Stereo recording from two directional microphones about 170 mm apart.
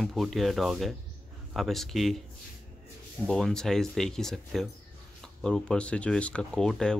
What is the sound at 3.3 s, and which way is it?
Speech, centre (ahead or behind).